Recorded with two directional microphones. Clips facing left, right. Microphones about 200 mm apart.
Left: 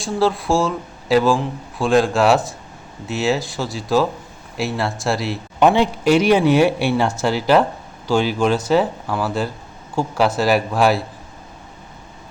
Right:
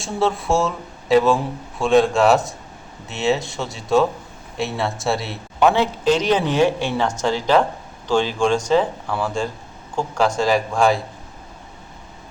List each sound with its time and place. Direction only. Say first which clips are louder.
0.0 s speech: left 2 dB; centre (ahead or behind)
5.5 s speech: left 2 dB; 15° left (ahead or behind)